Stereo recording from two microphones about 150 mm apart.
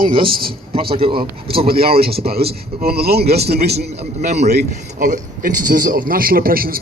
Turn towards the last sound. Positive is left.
turn(degrees=-75)  # may be behind; listen again after turning